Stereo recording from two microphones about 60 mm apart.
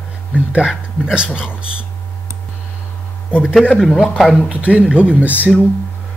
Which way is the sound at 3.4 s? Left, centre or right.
Centre.